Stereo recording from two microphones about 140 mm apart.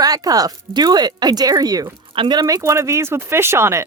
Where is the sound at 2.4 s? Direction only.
20° right (ahead or behind).